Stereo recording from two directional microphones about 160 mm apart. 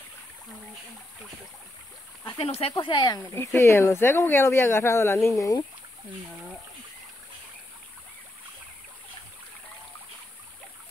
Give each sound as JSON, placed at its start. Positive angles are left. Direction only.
{"t": 2.3, "sound": "speech", "side_deg": 35}
{"t": 3.3, "sound": "speech", "side_deg": 15}